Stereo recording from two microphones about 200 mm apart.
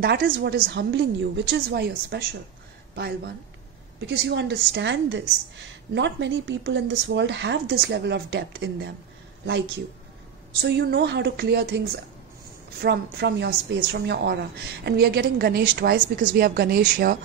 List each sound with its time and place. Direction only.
0.0 s speech: 55° right (ahead or behind)
4.1 s speech: 60° right (ahead or behind)
10.6 s speech: 55° right (ahead or behind)
12.8 s a woman's voice: 55° right (ahead or behind)